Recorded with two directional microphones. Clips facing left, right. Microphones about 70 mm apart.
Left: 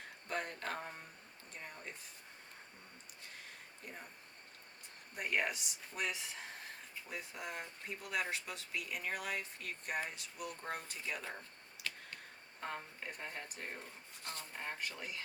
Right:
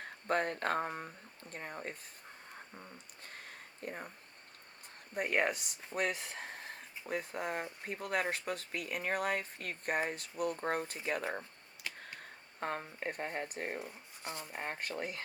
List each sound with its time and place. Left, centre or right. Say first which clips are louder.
0.3 s speech: right 8 dB; right
3.3 s a sound: right 4 dB; right
5.1 s speech: right 5 dB; right
11.8 s a sound: even; right
12.5 s speech: right 6 dB; right
14.2 s speech: right 4 dB; centre
14.6 s speech: right 5 dB; right